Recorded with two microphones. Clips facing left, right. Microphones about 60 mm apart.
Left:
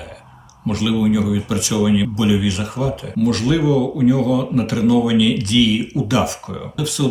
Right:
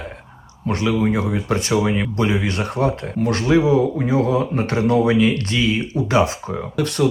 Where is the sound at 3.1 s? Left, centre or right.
Right.